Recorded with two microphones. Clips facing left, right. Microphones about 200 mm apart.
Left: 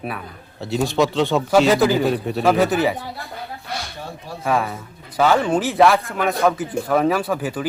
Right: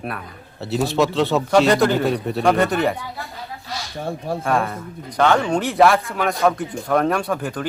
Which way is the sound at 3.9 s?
55° right (ahead or behind).